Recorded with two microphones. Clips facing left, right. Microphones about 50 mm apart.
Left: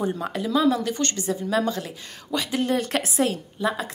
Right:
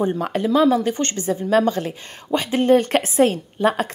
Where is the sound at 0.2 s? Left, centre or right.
Right.